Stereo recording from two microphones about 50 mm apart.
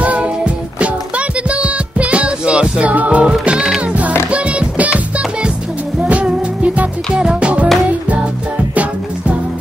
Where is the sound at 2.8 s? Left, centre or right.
Right.